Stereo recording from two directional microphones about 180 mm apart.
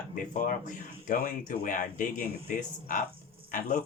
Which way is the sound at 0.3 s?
45° left (ahead or behind).